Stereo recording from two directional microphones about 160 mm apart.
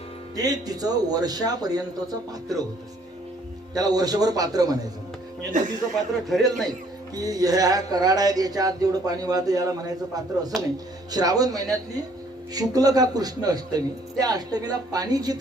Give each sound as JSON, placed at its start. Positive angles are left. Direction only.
{"t": 0.3, "sound": "speech", "side_deg": -25}
{"t": 3.8, "sound": "speech", "side_deg": -25}
{"t": 5.5, "sound": "speech", "side_deg": -55}
{"t": 6.2, "sound": "a man's voice", "side_deg": 0}
{"t": 7.2, "sound": "speech", "side_deg": -25}